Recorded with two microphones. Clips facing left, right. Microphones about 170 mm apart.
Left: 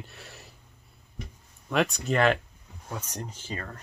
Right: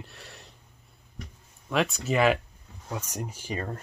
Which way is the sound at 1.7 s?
Centre (ahead or behind).